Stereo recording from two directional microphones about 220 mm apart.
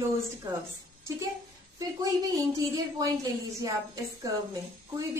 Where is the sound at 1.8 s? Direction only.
15° right (ahead or behind).